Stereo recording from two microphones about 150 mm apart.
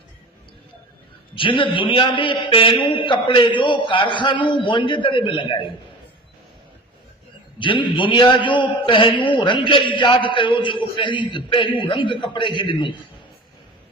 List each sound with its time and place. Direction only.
1.4 s a man's voice: 35° left (ahead or behind)
7.6 s a man's voice: 35° left (ahead or behind)